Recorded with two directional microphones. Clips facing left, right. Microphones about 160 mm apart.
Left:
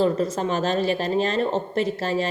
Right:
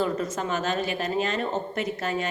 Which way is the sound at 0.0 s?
30° left (ahead or behind).